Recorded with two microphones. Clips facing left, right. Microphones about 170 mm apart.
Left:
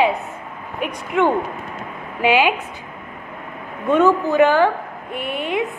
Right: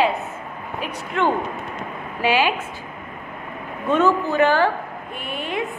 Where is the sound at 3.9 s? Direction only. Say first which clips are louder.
Left 3 dB; 15° left (ahead or behind).